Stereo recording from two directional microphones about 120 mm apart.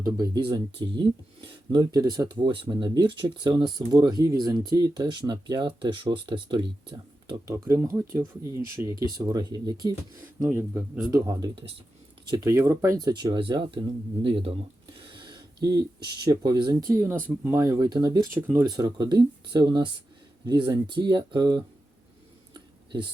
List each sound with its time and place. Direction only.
0.0 s speech: 35° right (ahead or behind)
10.4 s speech: 20° right (ahead or behind)
11.1 s speech: 30° right (ahead or behind); by 14.5 s 50° right (ahead or behind)
15.2 s a sound: 35° right (ahead or behind)
16.2 s speech: 30° right (ahead or behind)
18.3 s speech: 15° right (ahead or behind)
18.7 s speech: 35° right (ahead or behind)
22.5 s a sound: 40° right (ahead or behind)